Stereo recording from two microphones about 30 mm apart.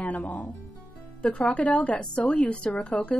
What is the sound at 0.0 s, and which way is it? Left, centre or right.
Speech, left.